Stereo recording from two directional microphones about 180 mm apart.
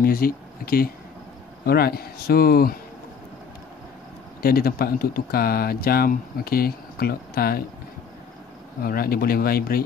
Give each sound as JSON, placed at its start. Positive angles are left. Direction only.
{"t": 0.0, "sound": "speech", "side_deg": 55}
{"t": 4.4, "sound": "speech", "side_deg": 55}
{"t": 8.8, "sound": "speech", "side_deg": 55}